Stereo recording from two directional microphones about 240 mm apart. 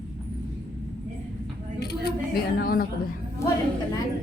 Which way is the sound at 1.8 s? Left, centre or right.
Left.